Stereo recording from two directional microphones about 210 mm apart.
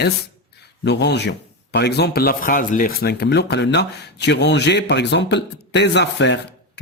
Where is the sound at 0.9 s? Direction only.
55° left (ahead or behind).